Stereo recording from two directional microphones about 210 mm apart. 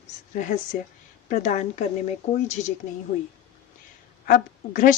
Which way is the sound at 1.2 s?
35° left (ahead or behind).